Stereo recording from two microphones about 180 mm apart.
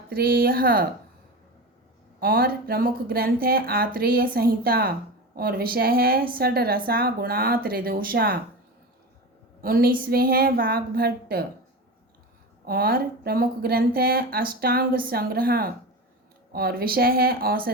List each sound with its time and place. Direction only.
0.1 s speech: 55° right (ahead or behind)
2.2 s speech: 55° right (ahead or behind)
9.6 s speech: 55° right (ahead or behind)
12.6 s speech: 55° right (ahead or behind)